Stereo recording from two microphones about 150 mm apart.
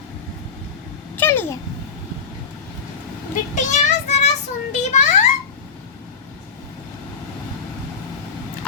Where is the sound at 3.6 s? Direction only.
50° left (ahead or behind).